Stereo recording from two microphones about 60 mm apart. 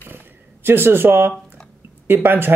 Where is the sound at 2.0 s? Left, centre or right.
Right.